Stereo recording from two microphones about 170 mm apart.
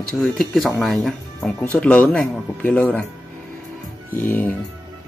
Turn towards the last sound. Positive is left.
turn(degrees=10)  # may be behind; listen again after turning